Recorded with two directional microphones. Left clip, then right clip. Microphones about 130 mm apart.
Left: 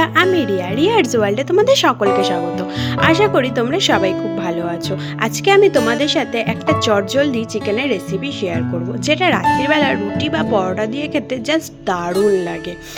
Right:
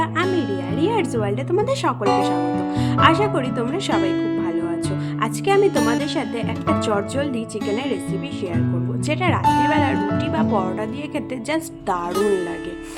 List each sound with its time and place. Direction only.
0.0 s music: 45° left (ahead or behind)
0.8 s speech: 35° left (ahead or behind)
9.0 s speech: 25° left (ahead or behind)